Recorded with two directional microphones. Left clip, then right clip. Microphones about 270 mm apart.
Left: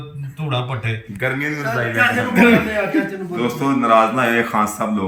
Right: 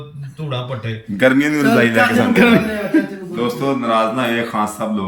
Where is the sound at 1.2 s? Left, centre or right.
Right.